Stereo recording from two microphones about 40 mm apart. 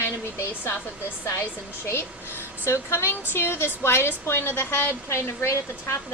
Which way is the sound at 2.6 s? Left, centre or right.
Left.